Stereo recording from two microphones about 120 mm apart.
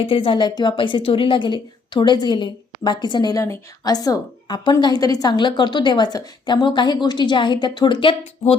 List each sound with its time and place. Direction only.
0.0 s a woman's voice: 50° left (ahead or behind)